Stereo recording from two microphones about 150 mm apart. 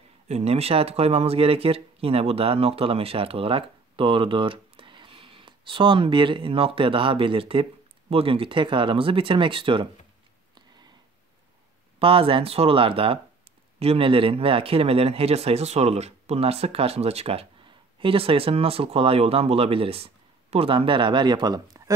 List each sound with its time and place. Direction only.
0.3 s speech: 45° right (ahead or behind)
12.0 s speech: 35° right (ahead or behind)